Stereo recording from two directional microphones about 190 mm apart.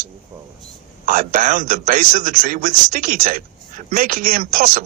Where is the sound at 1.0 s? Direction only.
45° right (ahead or behind).